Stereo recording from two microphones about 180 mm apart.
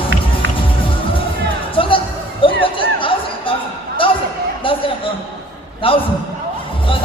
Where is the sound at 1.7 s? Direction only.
30° left (ahead or behind).